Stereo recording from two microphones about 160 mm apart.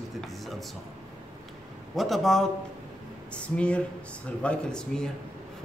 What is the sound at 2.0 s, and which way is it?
Speech, centre (ahead or behind).